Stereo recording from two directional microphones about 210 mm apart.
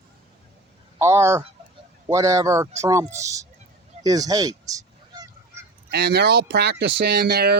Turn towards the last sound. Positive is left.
turn(degrees=-50)  # may be behind; listen again after turning